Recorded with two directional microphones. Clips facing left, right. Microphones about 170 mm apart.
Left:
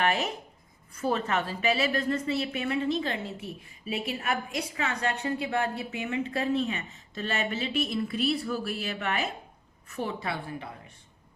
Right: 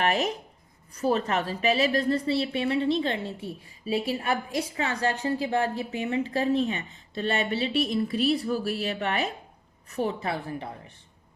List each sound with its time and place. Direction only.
0.0 s a woman's voice: 40° right (ahead or behind)